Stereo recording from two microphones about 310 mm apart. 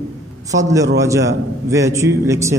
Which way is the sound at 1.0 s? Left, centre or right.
Centre.